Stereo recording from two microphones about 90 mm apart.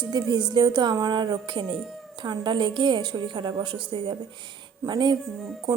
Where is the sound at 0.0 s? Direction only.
55° right (ahead or behind).